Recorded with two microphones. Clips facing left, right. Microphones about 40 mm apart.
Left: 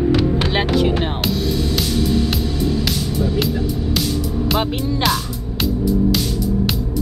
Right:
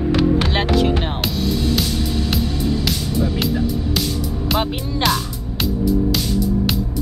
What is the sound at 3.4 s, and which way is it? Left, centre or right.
Music, centre.